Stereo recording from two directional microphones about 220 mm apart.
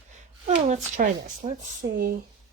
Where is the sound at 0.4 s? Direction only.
35° right (ahead or behind).